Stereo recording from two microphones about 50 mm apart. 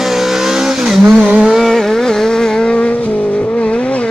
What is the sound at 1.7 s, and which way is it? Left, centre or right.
Vehicle, centre.